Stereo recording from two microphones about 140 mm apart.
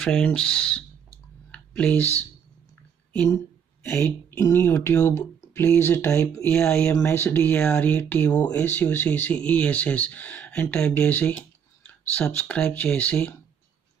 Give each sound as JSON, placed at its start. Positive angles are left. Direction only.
{"t": 0.0, "sound": "speech", "side_deg": 5}
{"t": 1.5, "sound": "a sound", "side_deg": 10}
{"t": 3.8, "sound": "speech", "side_deg": 15}